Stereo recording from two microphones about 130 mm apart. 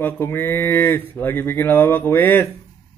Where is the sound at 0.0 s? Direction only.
15° left (ahead or behind).